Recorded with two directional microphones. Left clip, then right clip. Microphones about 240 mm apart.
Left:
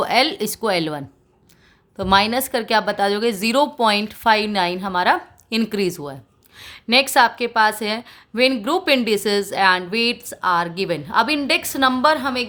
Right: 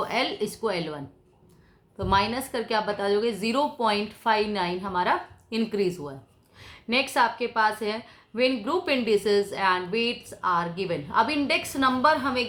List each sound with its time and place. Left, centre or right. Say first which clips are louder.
0.0 s a woman's voice: left 9 dB; left